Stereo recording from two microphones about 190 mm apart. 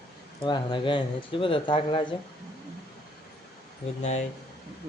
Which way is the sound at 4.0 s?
35° left (ahead or behind).